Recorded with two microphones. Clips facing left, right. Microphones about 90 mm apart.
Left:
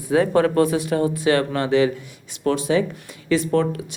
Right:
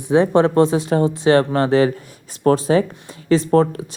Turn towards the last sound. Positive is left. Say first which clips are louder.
# right 4 dB
turn(degrees=-35)  # may be behind; listen again after turning